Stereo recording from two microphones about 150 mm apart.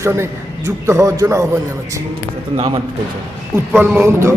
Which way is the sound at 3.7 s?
15° right (ahead or behind).